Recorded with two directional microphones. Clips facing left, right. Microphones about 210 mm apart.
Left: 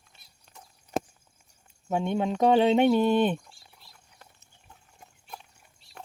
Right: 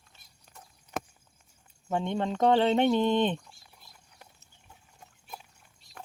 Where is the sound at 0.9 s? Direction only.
30° left (ahead or behind).